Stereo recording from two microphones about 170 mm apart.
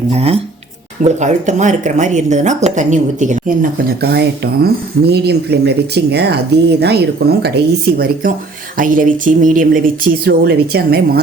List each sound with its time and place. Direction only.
0.1 s speech: 40° right (ahead or behind); by 7.5 s 75° right (ahead or behind)
7.9 s speech: 60° right (ahead or behind)